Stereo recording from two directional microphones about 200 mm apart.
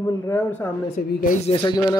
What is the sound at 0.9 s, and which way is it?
Speech, 40° left (ahead or behind).